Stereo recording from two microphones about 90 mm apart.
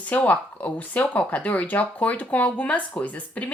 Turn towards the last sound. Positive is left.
turn(degrees=15)  # may be behind; listen again after turning